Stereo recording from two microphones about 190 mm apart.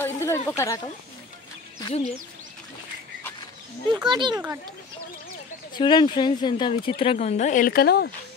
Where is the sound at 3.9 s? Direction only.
25° right (ahead or behind).